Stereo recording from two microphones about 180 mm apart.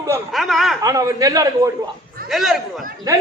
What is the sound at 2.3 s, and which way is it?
Speech, centre (ahead or behind).